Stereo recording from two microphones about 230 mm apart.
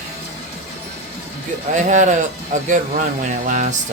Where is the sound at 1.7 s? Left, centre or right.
Right.